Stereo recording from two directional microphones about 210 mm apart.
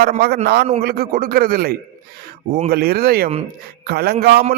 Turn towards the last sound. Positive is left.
turn(degrees=-50)  # may be behind; listen again after turning